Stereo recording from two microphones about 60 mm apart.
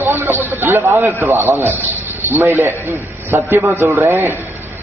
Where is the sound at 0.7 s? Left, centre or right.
Right.